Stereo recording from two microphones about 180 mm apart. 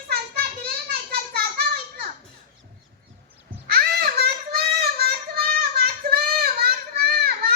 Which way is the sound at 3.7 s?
60° right (ahead or behind).